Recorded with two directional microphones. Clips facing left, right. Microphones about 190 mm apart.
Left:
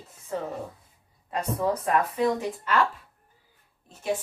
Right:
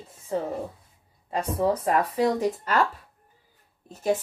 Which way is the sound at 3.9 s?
40° right (ahead or behind).